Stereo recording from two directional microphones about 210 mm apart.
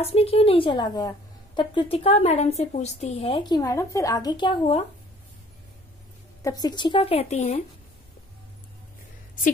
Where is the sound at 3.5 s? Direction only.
15° left (ahead or behind).